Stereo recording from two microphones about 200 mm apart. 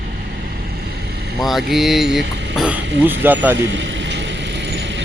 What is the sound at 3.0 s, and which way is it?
Speech, 10° right (ahead or behind).